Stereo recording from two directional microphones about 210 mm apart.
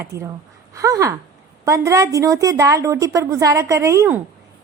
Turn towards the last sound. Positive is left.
turn(degrees=-10)  # may be behind; listen again after turning